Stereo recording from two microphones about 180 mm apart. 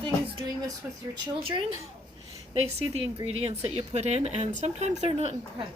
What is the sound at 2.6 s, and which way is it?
Speech, 35° right (ahead or behind).